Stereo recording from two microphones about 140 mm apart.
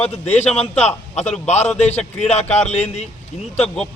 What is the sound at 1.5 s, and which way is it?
Speech, 55° left (ahead or behind).